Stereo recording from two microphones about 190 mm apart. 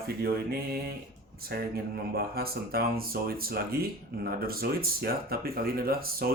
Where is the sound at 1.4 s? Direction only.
55° right (ahead or behind).